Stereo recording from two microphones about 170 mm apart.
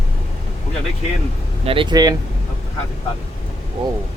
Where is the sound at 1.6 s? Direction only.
30° right (ahead or behind).